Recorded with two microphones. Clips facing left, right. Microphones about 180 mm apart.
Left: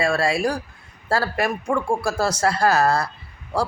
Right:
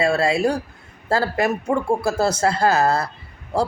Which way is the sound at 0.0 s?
25° right (ahead or behind).